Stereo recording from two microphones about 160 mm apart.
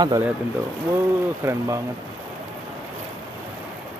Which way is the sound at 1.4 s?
20° right (ahead or behind).